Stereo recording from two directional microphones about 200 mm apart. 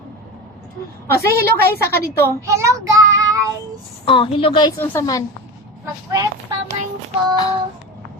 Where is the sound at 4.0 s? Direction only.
25° left (ahead or behind).